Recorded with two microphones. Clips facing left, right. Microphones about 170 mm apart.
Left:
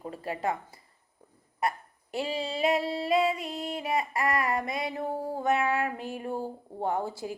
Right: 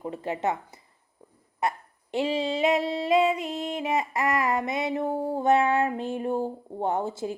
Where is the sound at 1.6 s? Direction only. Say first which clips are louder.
Right 2 dB; 20° right (ahead or behind).